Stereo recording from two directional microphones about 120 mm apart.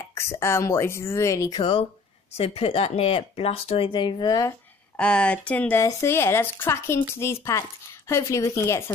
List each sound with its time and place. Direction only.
0.1 s speech: 20° left (ahead or behind)
1.6 s speech: 50° left (ahead or behind); by 4.6 s 30° left (ahead or behind)
4.9 s speech: 10° left (ahead or behind)